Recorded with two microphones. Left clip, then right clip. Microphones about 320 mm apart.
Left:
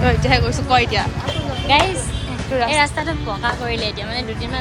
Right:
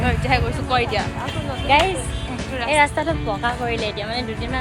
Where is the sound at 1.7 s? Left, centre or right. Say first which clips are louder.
Left 1 dB; centre.